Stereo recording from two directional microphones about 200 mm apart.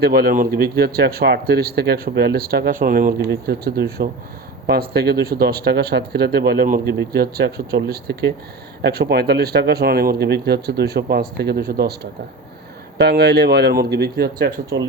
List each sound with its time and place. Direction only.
0.0 s speech: 50° right (ahead or behind)
13.0 s speech: 55° right (ahead or behind)